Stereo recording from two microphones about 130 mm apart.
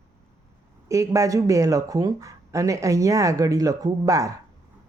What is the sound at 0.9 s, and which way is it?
Speech, 25° right (ahead or behind).